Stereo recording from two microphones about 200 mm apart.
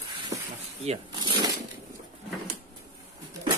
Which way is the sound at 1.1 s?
20° right (ahead or behind).